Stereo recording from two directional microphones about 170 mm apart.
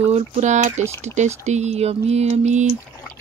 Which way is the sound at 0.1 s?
40° right (ahead or behind).